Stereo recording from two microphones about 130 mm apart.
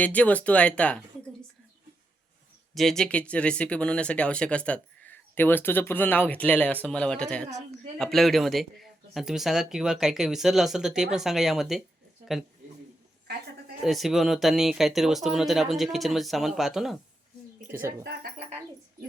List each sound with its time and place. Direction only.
0.0 s speech: 10° left (ahead or behind)
2.7 s speech: 5° left (ahead or behind)
13.8 s speech: centre (ahead or behind)
17.7 s speech: 20° right (ahead or behind)